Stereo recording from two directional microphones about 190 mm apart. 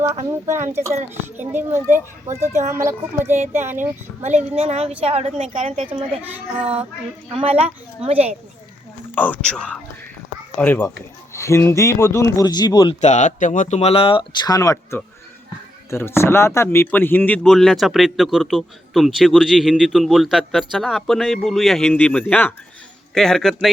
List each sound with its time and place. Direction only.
0.6 s a child's voice: 15° right (ahead or behind)
4.2 s a woman's voice: 35° right (ahead or behind)
9.1 s speech: 10° left (ahead or behind)
13.0 s speech: 40° left (ahead or behind); by 23.7 s centre (ahead or behind)